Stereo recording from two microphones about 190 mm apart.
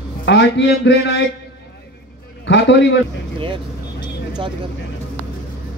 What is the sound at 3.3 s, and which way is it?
Speech, 25° right (ahead or behind).